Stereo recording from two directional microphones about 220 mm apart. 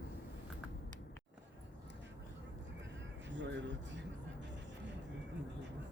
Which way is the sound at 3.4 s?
55° right (ahead or behind).